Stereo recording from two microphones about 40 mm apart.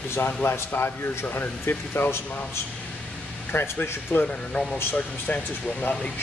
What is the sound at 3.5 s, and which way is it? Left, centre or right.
Speech, left.